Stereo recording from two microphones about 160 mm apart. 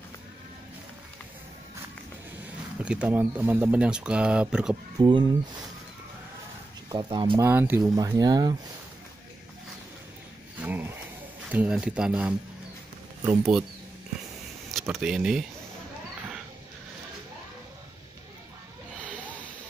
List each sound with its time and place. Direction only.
2.8 s speech: 5° right (ahead or behind)
5.0 s speech: 25° right (ahead or behind)
6.9 s speech: 25° right (ahead or behind)
7.3 s speech: 15° right (ahead or behind)
10.6 s a sound: 10° right (ahead or behind)
11.5 s speech: 5° right (ahead or behind)
14.7 s speech: centre (ahead or behind)